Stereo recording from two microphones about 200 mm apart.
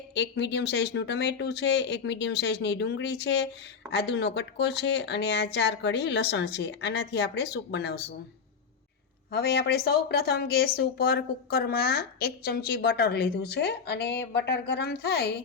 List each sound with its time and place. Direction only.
0.1 s speech: 60° left (ahead or behind)
9.3 s speech: 55° left (ahead or behind)